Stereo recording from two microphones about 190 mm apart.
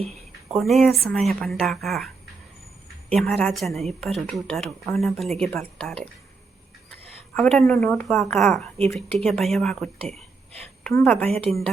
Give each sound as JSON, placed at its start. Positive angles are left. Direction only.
{"t": 0.5, "sound": "speech", "side_deg": 0}
{"t": 3.1, "sound": "speech", "side_deg": 5}
{"t": 7.3, "sound": "speech", "side_deg": 0}
{"t": 11.3, "sound": "a woman's voice", "side_deg": -30}